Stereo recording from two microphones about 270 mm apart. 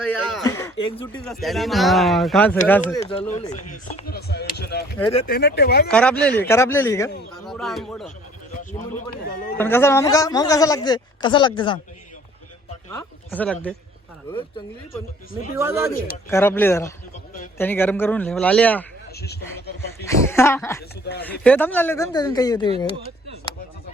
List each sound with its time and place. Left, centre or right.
0.4 s a woman's voice: centre
3.2 s speech: left
5.9 s a woman's voice: centre
9.2 s speech: left
9.6 s a woman's voice: centre
12.9 s speech: centre
15.5 s speech: centre
16.3 s a woman's voice: centre
19.2 s speech: left
20.1 s a woman's voice: centre